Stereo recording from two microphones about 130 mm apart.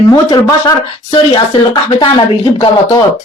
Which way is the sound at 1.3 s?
35° left (ahead or behind).